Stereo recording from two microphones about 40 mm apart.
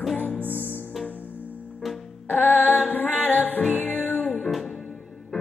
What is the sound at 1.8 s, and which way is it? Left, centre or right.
Music, centre.